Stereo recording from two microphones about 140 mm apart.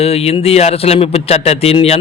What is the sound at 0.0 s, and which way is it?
Speech, 45° left (ahead or behind).